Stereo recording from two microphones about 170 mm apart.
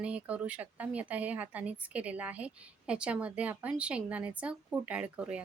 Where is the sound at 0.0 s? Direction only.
10° right (ahead or behind).